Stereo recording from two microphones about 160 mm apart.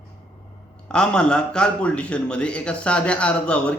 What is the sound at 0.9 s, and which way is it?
A man's voice, 5° left (ahead or behind).